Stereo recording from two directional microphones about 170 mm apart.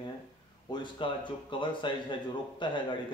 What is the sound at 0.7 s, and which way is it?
Speech, 30° left (ahead or behind).